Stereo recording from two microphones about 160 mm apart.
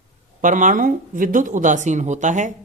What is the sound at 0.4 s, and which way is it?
Speech, 55° right (ahead or behind).